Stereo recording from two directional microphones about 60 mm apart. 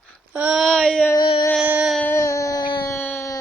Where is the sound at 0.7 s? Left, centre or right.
Centre.